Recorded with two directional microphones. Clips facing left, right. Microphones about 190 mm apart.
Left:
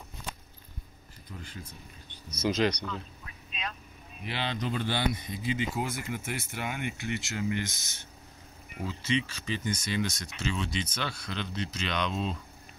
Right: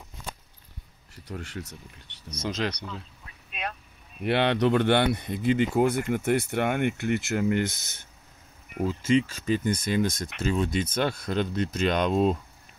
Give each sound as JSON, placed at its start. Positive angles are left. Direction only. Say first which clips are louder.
{"t": 1.1, "sound": "speech", "louder": "right 8 dB", "side_deg": -75}
{"t": 2.3, "sound": "speech", "louder": "left 3 dB", "side_deg": 0}
{"t": 3.4, "sound": "vehicle", "louder": "right 4 dB", "side_deg": -55}
{"t": 4.2, "sound": "speech", "louder": "right 11 dB", "side_deg": -60}
{"t": 8.7, "sound": "speech", "louder": "right 8 dB", "side_deg": -50}